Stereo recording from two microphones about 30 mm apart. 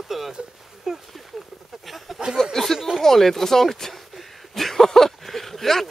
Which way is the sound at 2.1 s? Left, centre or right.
Centre.